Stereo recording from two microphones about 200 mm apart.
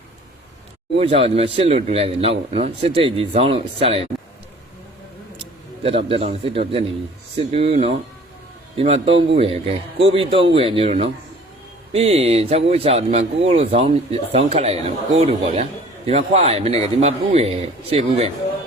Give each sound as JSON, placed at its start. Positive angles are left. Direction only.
{"t": 0.9, "sound": "speech", "side_deg": -30}
{"t": 5.8, "sound": "a man's voice", "side_deg": -30}